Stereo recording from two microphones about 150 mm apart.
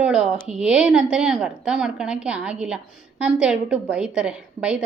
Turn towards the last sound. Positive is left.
turn(degrees=-5)  # may be behind; listen again after turning